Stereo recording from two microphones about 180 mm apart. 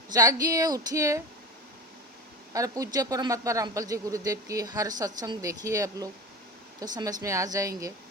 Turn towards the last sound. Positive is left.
turn(degrees=-20)  # may be behind; listen again after turning